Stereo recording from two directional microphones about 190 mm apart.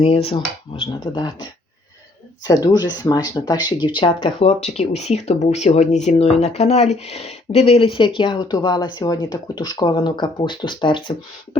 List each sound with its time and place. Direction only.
0.0 s speech: 30° left (ahead or behind)
2.5 s speech: 20° left (ahead or behind)